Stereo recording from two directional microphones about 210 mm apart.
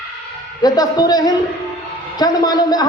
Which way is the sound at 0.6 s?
20° left (ahead or behind).